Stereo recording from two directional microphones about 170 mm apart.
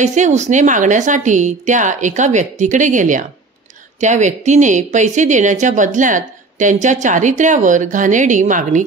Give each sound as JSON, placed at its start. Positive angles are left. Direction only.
{"t": 0.0, "sound": "speech", "side_deg": -45}